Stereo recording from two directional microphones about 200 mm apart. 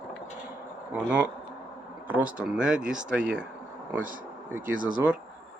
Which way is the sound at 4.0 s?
40° right (ahead or behind).